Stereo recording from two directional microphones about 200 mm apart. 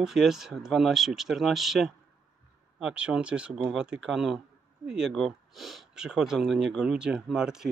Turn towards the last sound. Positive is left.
turn(degrees=-5)  # may be behind; listen again after turning